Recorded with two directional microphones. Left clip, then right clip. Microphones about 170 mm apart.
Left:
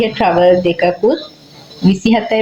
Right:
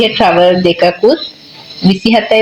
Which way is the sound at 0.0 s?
45° right (ahead or behind).